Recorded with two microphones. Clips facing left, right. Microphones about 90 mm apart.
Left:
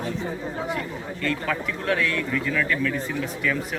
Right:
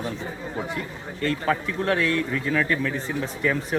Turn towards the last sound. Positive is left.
turn(degrees=-30)  # may be behind; listen again after turning